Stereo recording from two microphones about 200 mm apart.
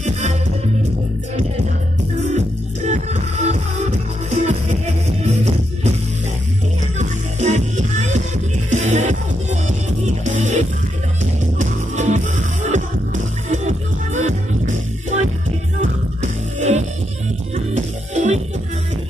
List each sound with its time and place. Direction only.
0.0 s music: 35° right (ahead or behind)
2.3 s music: 35° right (ahead or behind)
7.0 s music: 35° right (ahead or behind)